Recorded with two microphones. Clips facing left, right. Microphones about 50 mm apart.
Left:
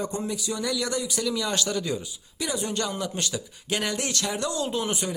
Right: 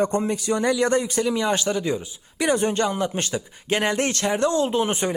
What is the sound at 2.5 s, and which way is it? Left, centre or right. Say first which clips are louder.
Speech: right 8 dB; right.